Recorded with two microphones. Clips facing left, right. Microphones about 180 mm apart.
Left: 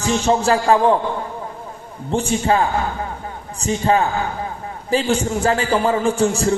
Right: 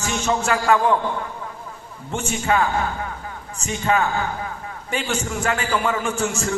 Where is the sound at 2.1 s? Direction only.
30° left (ahead or behind).